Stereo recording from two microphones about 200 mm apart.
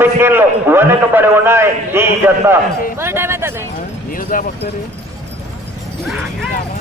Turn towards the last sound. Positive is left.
turn(degrees=0)  # may be behind; listen again after turning